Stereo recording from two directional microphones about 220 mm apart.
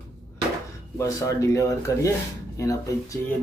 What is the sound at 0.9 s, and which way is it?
Speech, 15° left (ahead or behind).